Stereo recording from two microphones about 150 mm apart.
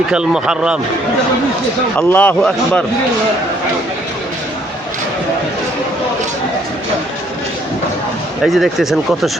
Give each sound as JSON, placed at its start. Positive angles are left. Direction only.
{"t": 0.1, "sound": "speech", "side_deg": -5}
{"t": 2.0, "sound": "speech", "side_deg": 10}
{"t": 8.4, "sound": "speech", "side_deg": 0}